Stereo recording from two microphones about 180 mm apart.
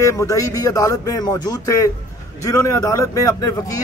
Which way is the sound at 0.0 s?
15° left (ahead or behind).